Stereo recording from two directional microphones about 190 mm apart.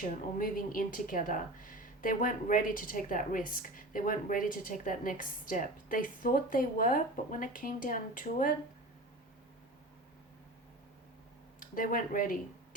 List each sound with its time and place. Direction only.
0.3 s a woman's voice: 45° left (ahead or behind)
11.6 s speech: 45° left (ahead or behind)